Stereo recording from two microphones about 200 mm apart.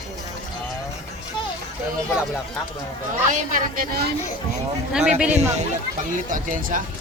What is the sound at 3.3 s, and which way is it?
Speech, 45° right (ahead or behind).